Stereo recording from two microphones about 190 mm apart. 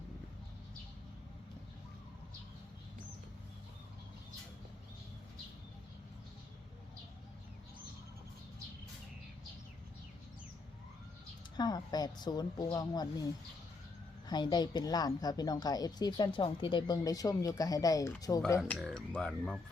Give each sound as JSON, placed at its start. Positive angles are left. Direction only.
{"t": 11.5, "sound": "a woman's voice", "side_deg": 20}
{"t": 14.3, "sound": "a woman's voice", "side_deg": 20}
{"t": 18.7, "sound": "speech", "side_deg": 0}